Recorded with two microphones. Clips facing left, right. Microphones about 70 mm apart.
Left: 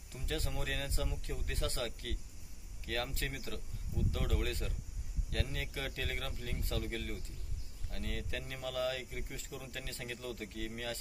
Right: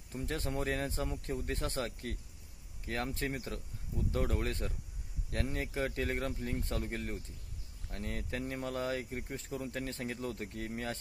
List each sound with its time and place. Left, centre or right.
0.1 s speech: right